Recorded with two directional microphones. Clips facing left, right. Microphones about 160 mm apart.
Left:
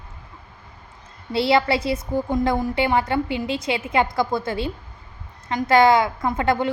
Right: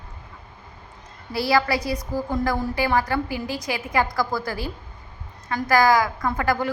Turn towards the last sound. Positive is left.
turn(degrees=25)  # may be behind; listen again after turning